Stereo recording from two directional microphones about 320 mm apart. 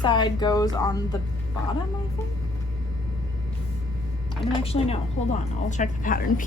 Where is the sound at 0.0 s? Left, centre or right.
Centre.